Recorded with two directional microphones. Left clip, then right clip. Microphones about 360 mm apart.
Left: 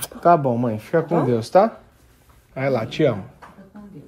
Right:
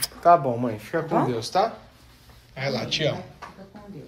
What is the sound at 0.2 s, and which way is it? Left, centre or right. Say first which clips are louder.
Speech: left 2 dB; left.